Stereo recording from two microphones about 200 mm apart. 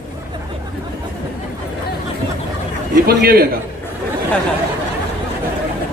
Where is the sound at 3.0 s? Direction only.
50° right (ahead or behind).